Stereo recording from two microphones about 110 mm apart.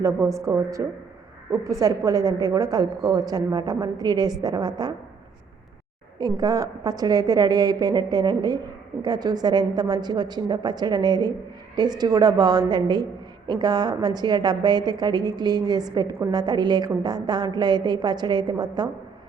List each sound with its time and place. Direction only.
0.0 s a woman's voice: 25° right (ahead or behind)
6.1 s a woman's voice: 40° right (ahead or behind)